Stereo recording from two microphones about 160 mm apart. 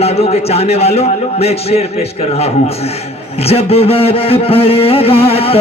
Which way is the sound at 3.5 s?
40° left (ahead or behind).